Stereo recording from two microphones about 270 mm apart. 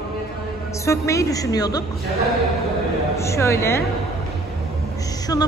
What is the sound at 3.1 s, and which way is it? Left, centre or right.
Speech, centre.